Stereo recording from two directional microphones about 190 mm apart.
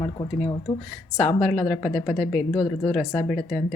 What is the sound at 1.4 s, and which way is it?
Speech, 5° left (ahead or behind).